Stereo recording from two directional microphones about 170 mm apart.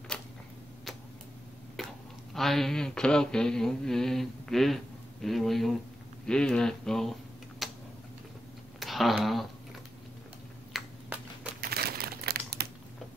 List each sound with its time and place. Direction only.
1.8 s a sound: centre (ahead or behind)
2.3 s mantra: centre (ahead or behind)
6.2 s speech: 5° left (ahead or behind)
8.7 s a sound: centre (ahead or behind)
10.7 s finger snapping: centre (ahead or behind)
11.6 s crumpling: 65° right (ahead or behind)